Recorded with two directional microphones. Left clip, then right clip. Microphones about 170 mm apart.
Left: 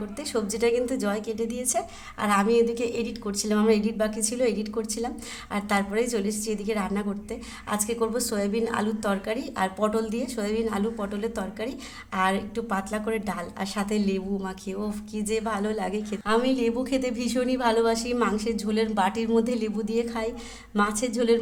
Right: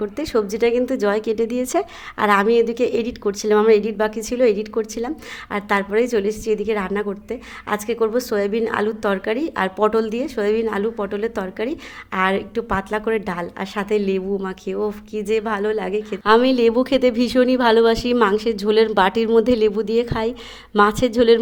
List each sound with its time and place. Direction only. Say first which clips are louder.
0.2 s a woman's voice: right 7 dB; 30° right (ahead or behind)
16.2 s a woman's voice: right 10 dB; 45° right (ahead or behind)